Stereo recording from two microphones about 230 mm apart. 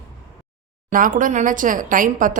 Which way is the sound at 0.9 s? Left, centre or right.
Right.